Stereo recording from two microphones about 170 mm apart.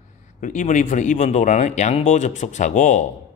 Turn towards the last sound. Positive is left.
turn(degrees=45)  # may be behind; listen again after turning